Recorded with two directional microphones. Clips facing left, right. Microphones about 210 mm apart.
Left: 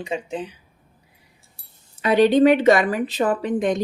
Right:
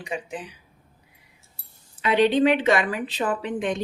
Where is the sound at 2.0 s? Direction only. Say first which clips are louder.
Left 4 dB; 40° left (ahead or behind).